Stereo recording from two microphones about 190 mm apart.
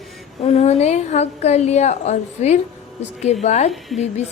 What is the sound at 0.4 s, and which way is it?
A woman's voice, 35° left (ahead or behind).